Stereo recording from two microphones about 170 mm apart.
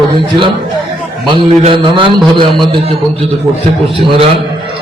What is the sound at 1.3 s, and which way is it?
A man's voice, 30° right (ahead or behind).